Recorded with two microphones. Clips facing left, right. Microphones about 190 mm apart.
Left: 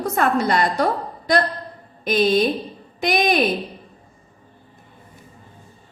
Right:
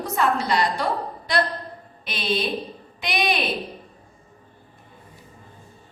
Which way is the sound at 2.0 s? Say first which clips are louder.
Left 9 dB; 45° left (ahead or behind).